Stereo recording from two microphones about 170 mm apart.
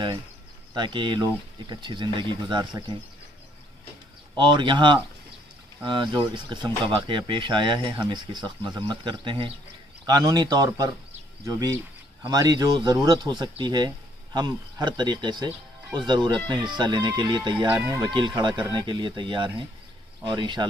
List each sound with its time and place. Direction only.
0.7 s speech: 25° right (ahead or behind)
4.4 s speech: 30° right (ahead or behind)
17.6 s speech: 10° right (ahead or behind)
18.0 s speech: 25° right (ahead or behind)